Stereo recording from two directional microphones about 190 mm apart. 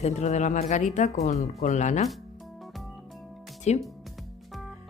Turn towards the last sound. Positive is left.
turn(degrees=35)  # may be behind; listen again after turning